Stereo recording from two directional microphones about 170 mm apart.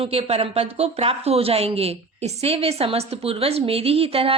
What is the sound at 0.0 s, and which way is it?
Speech, 35° right (ahead or behind).